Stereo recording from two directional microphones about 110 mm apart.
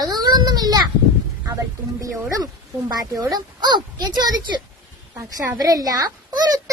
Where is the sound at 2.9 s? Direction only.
35° right (ahead or behind).